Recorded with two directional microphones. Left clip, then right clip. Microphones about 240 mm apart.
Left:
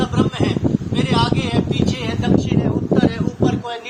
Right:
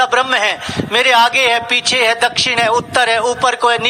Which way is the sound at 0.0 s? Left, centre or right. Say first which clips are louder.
Right 8 dB; right.